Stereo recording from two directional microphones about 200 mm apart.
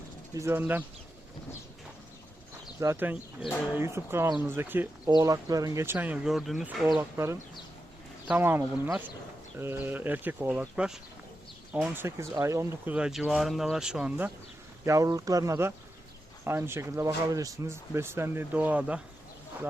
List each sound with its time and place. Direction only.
0.3 s speech: 15° right (ahead or behind)
2.8 s speech: 10° right (ahead or behind)
14.8 s speech: 15° right (ahead or behind)